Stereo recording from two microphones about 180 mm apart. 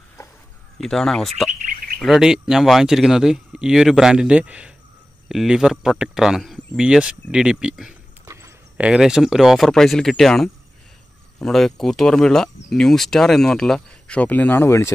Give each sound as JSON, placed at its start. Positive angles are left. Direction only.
{"t": 0.7, "sound": "speech", "side_deg": 5}
{"t": 1.5, "sound": "bird", "side_deg": -50}
{"t": 2.0, "sound": "speech", "side_deg": 0}